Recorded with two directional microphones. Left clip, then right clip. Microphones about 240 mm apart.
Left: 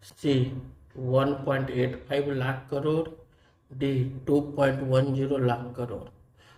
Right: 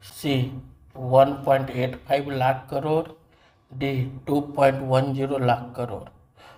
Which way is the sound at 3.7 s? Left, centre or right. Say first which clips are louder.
Right 1 dB; right.